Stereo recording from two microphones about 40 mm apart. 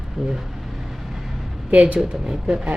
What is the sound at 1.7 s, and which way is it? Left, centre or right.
Speech, right.